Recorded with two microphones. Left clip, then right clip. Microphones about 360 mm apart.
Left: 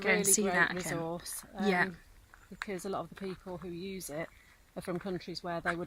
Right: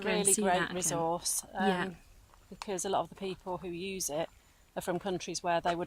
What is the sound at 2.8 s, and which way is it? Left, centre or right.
Speech, right.